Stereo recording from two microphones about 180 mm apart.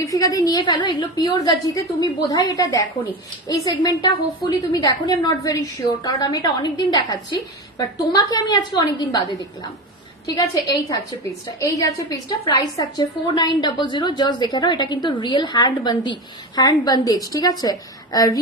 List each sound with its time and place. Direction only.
0.1 s a woman's voice: 20° left (ahead or behind)